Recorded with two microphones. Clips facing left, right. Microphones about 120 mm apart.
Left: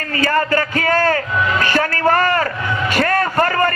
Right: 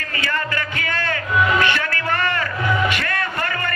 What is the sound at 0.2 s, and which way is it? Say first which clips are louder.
A man's voice: left 9 dB; 40° left (ahead or behind).